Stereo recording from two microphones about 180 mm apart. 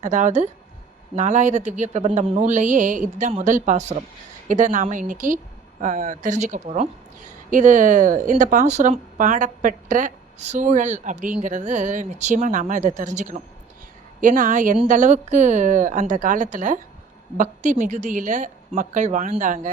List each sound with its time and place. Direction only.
0.0 s speech: 40° right (ahead or behind)